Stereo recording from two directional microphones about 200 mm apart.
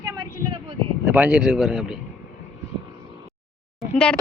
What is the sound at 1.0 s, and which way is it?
Speech, 10° right (ahead or behind).